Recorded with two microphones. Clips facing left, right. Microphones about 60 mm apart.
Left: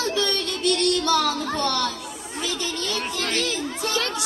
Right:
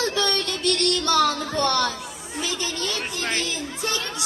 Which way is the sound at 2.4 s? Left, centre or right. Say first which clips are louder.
Even; centre.